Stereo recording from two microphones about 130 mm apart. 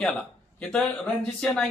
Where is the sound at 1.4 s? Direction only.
5° left (ahead or behind).